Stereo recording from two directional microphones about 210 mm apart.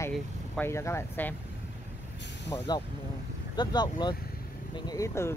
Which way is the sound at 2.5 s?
20° left (ahead or behind).